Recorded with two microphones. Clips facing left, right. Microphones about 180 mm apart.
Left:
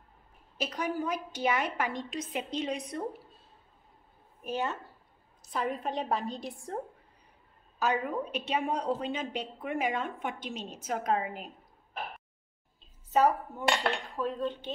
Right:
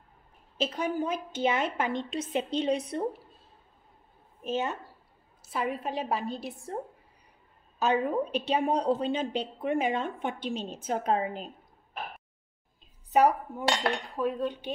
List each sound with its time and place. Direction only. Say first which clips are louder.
0.6 s a woman's voice: right 3 dB; 25° right (ahead or behind)
4.4 s a woman's voice: right 2 dB; 20° right (ahead or behind)
5.5 s a woman's voice: right 1 dB; 5° right (ahead or behind)
7.8 s a woman's voice: right 4 dB; 30° right (ahead or behind)
13.1 s cutlery: right 2 dB; 15° right (ahead or behind)